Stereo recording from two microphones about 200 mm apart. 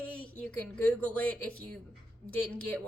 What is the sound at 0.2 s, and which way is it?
Speech, 5° left (ahead or behind).